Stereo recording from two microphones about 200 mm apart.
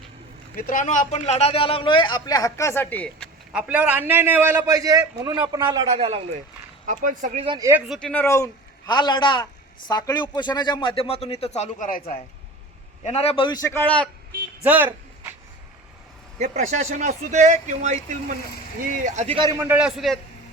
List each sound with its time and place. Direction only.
0.5 s a man's voice: 40° left (ahead or behind); by 3.2 s 10° left (ahead or behind)
3.5 s a man's voice: 5° right (ahead or behind); by 6.4 s 30° right (ahead or behind)
6.8 s speech: 40° right (ahead or behind)
7.4 s speech: 25° right (ahead or behind)
8.0 s a man's voice: 10° left (ahead or behind); by 12.1 s 45° left (ahead or behind)
13.0 s a man's voice: 30° left (ahead or behind); by 14.1 s 5° left (ahead or behind)
14.6 s a man's voice: 10° right (ahead or behind)
16.4 s speech: 35° right (ahead or behind)
19.5 s a man's voice: 10° right (ahead or behind)